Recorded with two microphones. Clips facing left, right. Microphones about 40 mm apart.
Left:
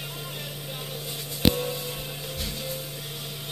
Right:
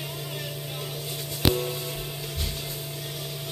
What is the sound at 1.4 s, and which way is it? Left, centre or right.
Music, left.